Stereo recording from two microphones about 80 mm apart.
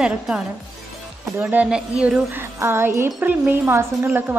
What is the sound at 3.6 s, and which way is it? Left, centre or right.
Speech, right.